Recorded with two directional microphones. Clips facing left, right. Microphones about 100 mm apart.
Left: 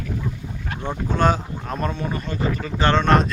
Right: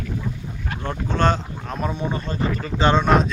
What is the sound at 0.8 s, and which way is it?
Speech, 10° left (ahead or behind).